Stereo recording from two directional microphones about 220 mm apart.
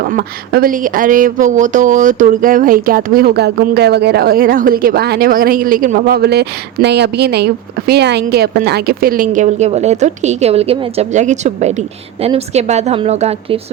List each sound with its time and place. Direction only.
0.0 s speech: 45° right (ahead or behind)